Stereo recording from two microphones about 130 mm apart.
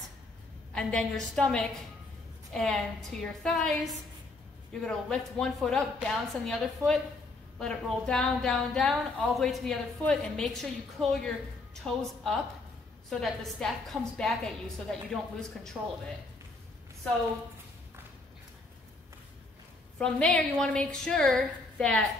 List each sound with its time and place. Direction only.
0.7 s a woman's voice: 5° left (ahead or behind)
20.0 s a woman's voice: 10° left (ahead or behind)